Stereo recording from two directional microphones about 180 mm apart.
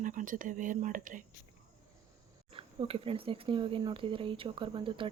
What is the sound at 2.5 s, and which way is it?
Speech, 30° right (ahead or behind).